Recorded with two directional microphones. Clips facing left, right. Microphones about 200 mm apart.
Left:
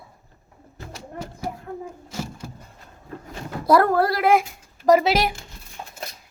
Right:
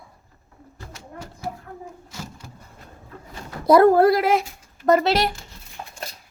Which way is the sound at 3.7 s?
20° right (ahead or behind).